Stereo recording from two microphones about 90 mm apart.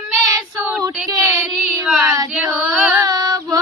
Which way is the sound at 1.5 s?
10° right (ahead or behind).